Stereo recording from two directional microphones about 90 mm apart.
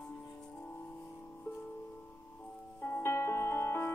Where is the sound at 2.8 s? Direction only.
25° left (ahead or behind).